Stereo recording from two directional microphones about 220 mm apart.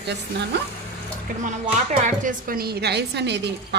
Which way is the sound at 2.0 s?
35° right (ahead or behind).